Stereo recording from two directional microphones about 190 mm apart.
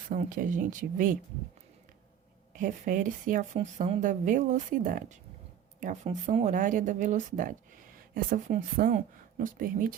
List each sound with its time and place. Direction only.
0.1 s speech: 45° right (ahead or behind)
2.6 s speech: 45° right (ahead or behind)